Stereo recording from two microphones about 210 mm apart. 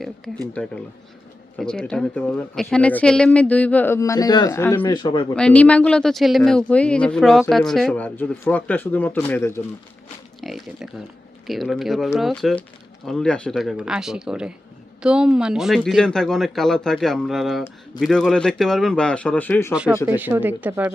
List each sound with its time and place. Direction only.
0.5 s speech: 5° left (ahead or behind); by 5.2 s 20° left (ahead or behind)
5.3 s speech: 5° left (ahead or behind)
10.4 s speech: centre (ahead or behind)
19.7 s speech: 5° right (ahead or behind)